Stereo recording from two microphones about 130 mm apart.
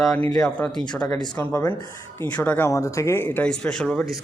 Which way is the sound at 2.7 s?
25° left (ahead or behind).